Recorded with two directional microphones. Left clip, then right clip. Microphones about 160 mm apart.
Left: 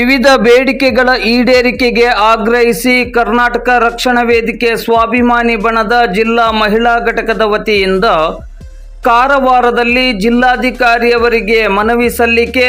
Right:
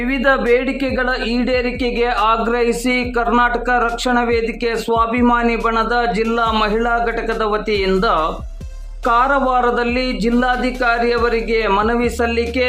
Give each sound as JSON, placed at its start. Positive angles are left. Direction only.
{"t": 0.0, "sound": "a man's voice", "side_deg": 35}